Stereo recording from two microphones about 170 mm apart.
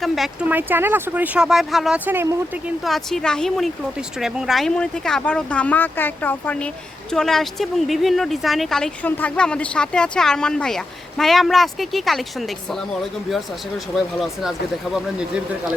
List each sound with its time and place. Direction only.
0.0 s speech: 5° right (ahead or behind)
13.9 s speech: centre (ahead or behind)